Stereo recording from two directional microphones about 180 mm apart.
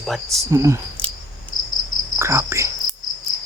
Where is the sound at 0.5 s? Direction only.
15° right (ahead or behind).